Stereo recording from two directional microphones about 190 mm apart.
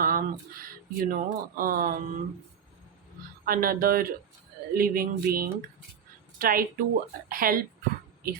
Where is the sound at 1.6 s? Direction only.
50° right (ahead or behind).